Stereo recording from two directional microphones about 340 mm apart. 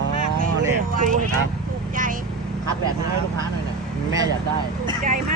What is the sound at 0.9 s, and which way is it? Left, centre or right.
Speech, right.